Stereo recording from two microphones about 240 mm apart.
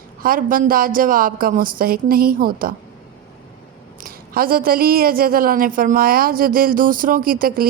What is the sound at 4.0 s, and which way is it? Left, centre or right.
A woman's voice, right.